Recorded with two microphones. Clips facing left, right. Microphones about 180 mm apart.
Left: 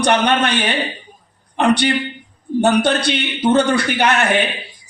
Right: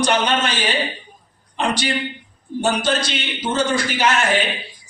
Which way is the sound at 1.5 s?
60° left (ahead or behind).